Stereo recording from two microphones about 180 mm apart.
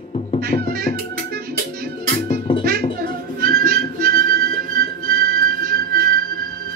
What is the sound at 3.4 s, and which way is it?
Music, 55° right (ahead or behind).